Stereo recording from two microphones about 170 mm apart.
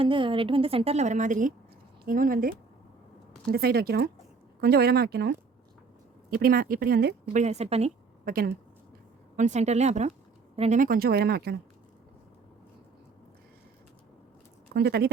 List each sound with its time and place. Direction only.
0.0 s a woman's voice: 30° right (ahead or behind); by 5.4 s 75° right (ahead or behind)
6.3 s speech: 60° right (ahead or behind)
7.3 s a woman's voice: 40° right (ahead or behind)
8.2 s speech: 60° right (ahead or behind)
9.3 s a woman's voice: 45° right (ahead or behind)
10.8 s speech: 60° right (ahead or behind)
14.7 s speech: 70° right (ahead or behind)